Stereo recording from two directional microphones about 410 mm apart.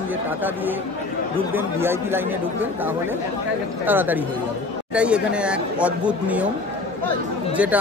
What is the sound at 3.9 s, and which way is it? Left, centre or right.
Speech, centre.